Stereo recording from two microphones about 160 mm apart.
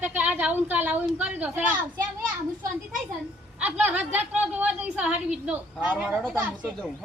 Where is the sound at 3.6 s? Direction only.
10° right (ahead or behind).